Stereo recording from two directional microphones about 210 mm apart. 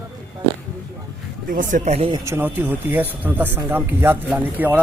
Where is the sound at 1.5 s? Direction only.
40° right (ahead or behind).